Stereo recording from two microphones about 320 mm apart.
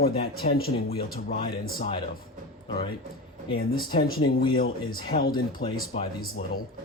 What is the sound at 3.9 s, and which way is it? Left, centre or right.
Speech, left.